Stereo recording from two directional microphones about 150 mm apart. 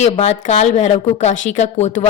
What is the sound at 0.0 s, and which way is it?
Speech, 45° left (ahead or behind).